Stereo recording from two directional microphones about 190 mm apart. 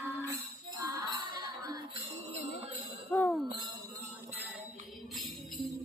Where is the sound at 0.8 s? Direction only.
20° right (ahead or behind).